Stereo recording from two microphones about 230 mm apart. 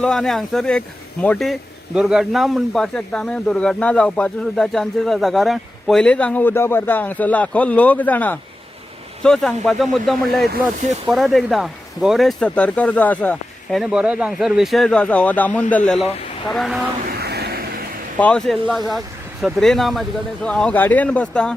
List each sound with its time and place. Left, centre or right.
0.0 s speech: centre
17.1 s a sound: right
18.2 s speech: centre